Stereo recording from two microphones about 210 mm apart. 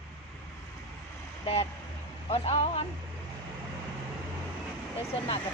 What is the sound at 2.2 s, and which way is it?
Speech, 30° left (ahead or behind).